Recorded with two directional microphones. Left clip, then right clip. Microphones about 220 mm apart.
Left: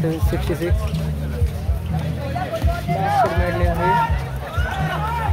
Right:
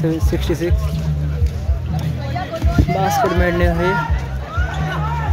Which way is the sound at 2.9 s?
40° right (ahead or behind).